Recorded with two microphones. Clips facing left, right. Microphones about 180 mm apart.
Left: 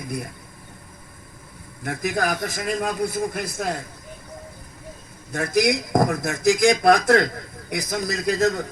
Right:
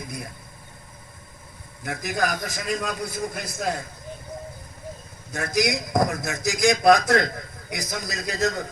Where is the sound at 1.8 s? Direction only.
55° left (ahead or behind).